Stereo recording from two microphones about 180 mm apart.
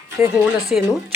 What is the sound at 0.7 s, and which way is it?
Speech, 5° right (ahead or behind).